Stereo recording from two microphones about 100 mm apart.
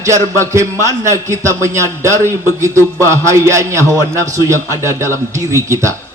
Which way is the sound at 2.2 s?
25° left (ahead or behind).